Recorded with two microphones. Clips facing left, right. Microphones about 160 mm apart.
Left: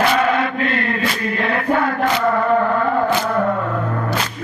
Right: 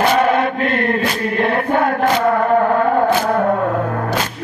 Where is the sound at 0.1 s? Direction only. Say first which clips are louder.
Right 3 dB; 45° right (ahead or behind).